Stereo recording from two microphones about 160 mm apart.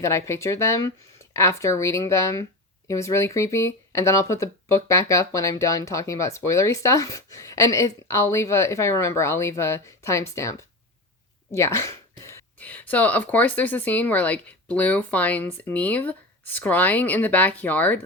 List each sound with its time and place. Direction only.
0.0 s a woman's voice: 15° left (ahead or behind)